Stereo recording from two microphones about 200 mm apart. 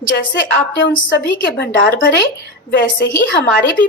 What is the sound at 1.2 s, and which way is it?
Speech, 60° left (ahead or behind).